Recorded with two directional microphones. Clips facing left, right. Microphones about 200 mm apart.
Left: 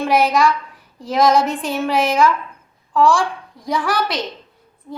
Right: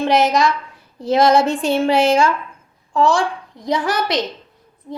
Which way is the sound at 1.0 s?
25° right (ahead or behind).